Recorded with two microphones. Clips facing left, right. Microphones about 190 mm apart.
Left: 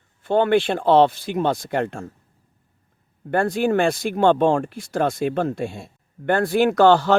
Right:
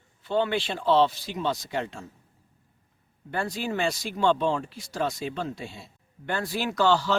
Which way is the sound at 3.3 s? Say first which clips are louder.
Left 10 dB; 55° left (ahead or behind).